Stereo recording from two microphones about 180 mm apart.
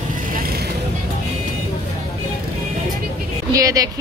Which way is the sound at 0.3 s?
55° right (ahead or behind).